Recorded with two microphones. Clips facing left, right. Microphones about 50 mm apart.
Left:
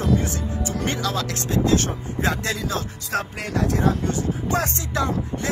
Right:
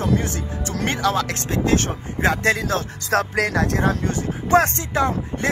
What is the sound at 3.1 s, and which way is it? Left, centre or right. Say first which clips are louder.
Speech: right 6 dB; right.